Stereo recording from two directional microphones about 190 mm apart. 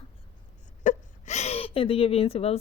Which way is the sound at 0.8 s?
35° left (ahead or behind).